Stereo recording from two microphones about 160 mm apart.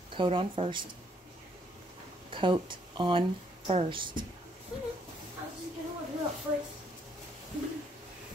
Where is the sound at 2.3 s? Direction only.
30° right (ahead or behind).